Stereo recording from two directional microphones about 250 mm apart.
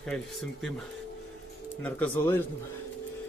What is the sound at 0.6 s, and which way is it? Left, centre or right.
Speech, centre.